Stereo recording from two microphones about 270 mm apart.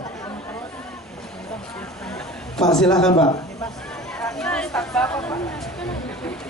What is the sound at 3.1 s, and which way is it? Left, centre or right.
Speech, left.